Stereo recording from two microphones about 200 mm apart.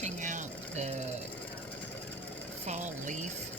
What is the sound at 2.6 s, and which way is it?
Speech, 35° right (ahead or behind).